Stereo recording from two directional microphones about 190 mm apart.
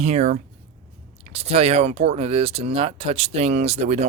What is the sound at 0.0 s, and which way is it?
Speech, 35° right (ahead or behind).